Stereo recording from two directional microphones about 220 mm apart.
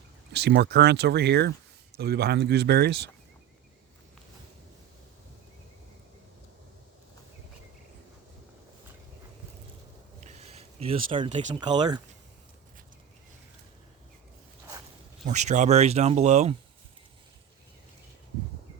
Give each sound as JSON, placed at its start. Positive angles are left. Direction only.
{"t": 0.3, "sound": "speech", "side_deg": -50}
{"t": 10.2, "sound": "a sound", "side_deg": -30}
{"t": 11.6, "sound": "speech", "side_deg": -20}
{"t": 15.3, "sound": "speech", "side_deg": -30}